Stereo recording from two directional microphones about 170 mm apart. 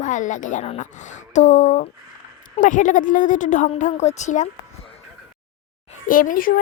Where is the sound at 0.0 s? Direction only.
45° left (ahead or behind).